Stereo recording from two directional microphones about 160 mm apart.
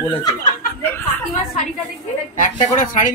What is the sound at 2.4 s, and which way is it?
Speech, 55° left (ahead or behind).